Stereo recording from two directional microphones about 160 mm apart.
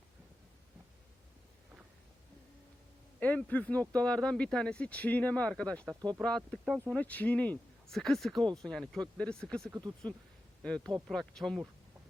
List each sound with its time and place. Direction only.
3.2 s speech: 10° left (ahead or behind)
5.8 s speech: 20° right (ahead or behind)
6.2 s speech: 5° left (ahead or behind)
9.6 s speech: 15° right (ahead or behind)
11.1 s speech: centre (ahead or behind)